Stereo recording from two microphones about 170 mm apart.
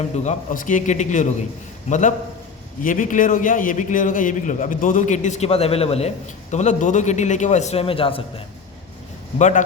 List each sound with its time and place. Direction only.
0.3 s a man's voice: 50° left (ahead or behind); by 8.2 s 30° left (ahead or behind)
9.4 s a man's voice: 45° left (ahead or behind)